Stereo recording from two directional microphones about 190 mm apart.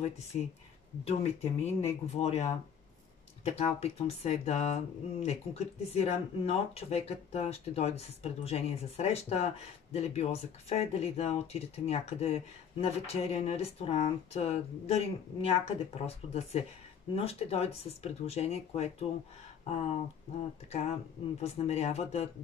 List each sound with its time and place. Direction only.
1.0 s speech: 35° left (ahead or behind)